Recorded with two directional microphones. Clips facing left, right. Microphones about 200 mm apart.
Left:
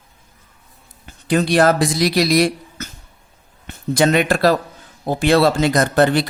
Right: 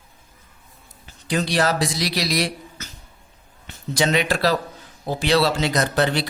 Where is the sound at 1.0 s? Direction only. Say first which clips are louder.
Left 6 dB; 55° left (ahead or behind).